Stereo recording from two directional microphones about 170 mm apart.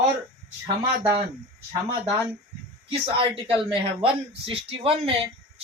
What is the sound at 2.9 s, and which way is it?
Speech, 35° right (ahead or behind).